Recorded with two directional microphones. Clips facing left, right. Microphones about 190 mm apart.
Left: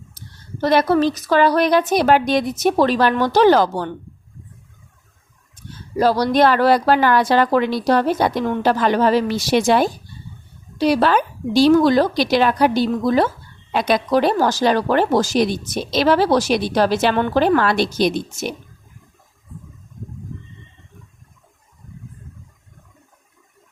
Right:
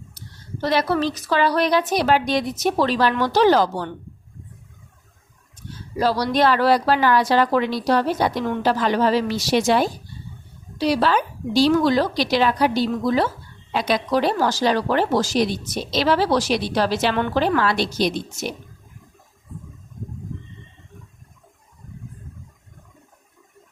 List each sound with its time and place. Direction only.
0.6 s speech: 50° left (ahead or behind)
6.0 s speech: 45° left (ahead or behind)